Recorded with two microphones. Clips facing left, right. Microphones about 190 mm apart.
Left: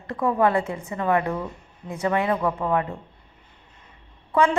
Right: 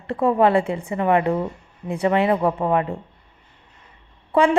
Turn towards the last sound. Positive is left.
turn(degrees=-30)  # may be behind; listen again after turning